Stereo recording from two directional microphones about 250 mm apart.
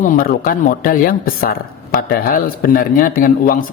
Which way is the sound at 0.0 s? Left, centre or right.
Left.